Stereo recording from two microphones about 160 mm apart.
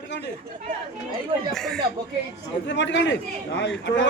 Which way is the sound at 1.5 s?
5° left (ahead or behind).